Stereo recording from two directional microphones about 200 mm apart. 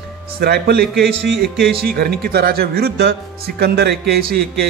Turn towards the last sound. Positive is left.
turn(degrees=-50)  # may be behind; listen again after turning